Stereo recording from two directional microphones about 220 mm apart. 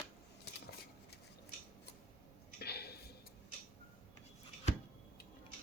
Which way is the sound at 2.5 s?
45° left (ahead or behind).